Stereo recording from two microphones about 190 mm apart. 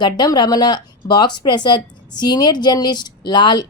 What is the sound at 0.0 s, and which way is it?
Speech, 20° left (ahead or behind).